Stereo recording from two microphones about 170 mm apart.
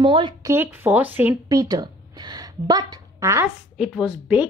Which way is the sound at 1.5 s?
20° right (ahead or behind).